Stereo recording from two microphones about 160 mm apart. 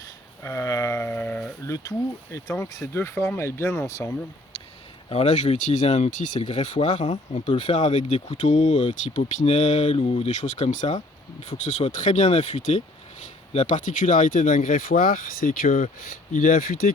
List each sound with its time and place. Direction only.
0.4 s sheep: 20° left (ahead or behind)
1.6 s speech: 20° left (ahead or behind)
5.0 s speech: 40° left (ahead or behind)